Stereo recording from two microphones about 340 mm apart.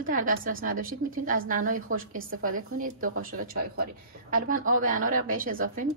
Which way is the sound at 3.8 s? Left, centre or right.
Right.